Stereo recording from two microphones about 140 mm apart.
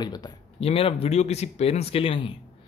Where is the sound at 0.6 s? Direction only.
45° left (ahead or behind).